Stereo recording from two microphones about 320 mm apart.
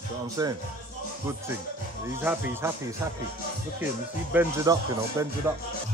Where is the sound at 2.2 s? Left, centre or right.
Centre.